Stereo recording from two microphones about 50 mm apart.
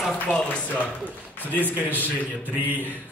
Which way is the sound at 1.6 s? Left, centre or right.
Right.